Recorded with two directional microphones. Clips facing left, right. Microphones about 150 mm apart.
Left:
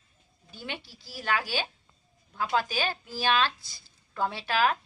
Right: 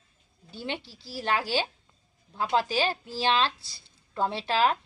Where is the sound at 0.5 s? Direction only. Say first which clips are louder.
Right 4 dB; 25° right (ahead or behind).